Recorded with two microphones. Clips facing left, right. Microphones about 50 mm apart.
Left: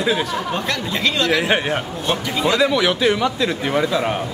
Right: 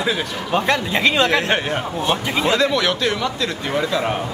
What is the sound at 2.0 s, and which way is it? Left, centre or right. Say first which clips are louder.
Speech: even; centre.